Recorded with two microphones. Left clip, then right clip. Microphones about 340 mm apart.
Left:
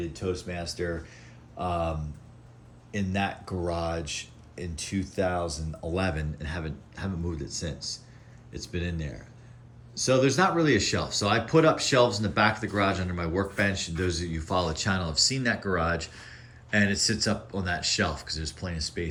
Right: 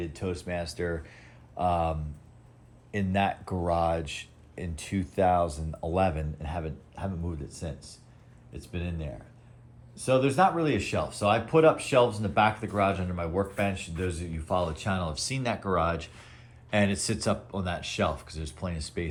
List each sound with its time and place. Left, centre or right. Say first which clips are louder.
0.0 s speech: left 2 dB; centre
7.5 s speech: left 6 dB; centre
10.2 s speech: left 1 dB; centre